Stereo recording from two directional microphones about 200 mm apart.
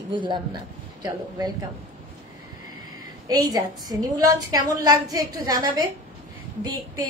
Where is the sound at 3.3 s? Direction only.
20° right (ahead or behind).